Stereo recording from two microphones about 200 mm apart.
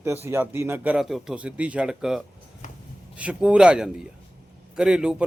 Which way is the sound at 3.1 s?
5° right (ahead or behind).